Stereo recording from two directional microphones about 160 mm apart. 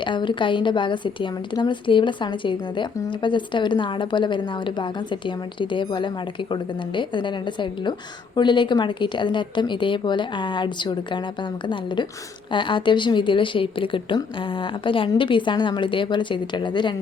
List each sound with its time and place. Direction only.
0.0 s a woman's voice: 30° left (ahead or behind)